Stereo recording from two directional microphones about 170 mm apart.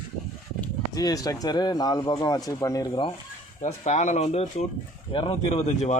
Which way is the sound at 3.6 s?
45° left (ahead or behind).